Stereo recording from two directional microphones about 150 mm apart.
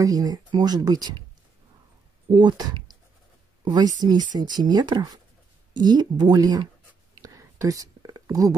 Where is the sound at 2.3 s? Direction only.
30° right (ahead or behind).